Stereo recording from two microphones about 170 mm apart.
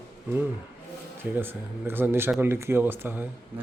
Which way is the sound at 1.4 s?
10° right (ahead or behind).